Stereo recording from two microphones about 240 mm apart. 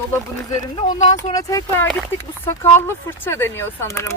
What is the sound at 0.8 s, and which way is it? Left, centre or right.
Speech, left.